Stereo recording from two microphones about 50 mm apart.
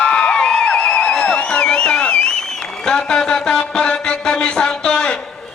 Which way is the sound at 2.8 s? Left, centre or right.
Centre.